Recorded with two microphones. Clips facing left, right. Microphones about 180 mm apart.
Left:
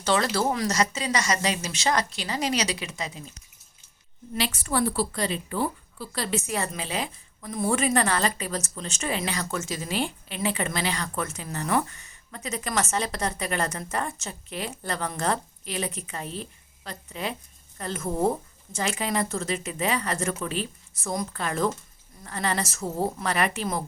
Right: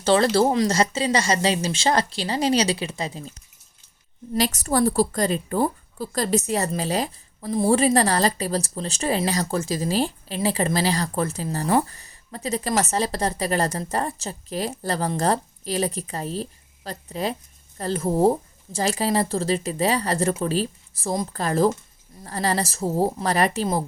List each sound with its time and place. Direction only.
0.0 s a woman's voice: 30° right (ahead or behind)
4.4 s a woman's voice: 40° right (ahead or behind)